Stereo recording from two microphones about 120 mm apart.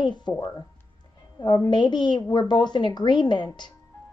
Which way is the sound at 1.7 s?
40° left (ahead or behind).